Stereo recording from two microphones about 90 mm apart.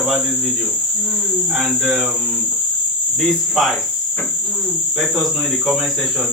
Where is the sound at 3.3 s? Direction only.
Centre (ahead or behind).